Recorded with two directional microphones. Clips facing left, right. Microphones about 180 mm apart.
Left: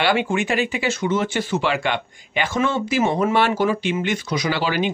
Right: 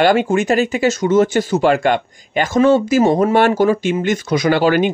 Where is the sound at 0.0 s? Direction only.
45° right (ahead or behind).